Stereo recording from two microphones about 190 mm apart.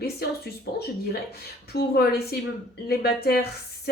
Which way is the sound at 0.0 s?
55° left (ahead or behind).